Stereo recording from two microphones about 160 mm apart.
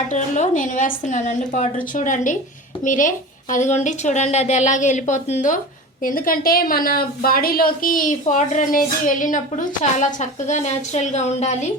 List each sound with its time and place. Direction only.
0.1 s a woman's voice: 50° left (ahead or behind)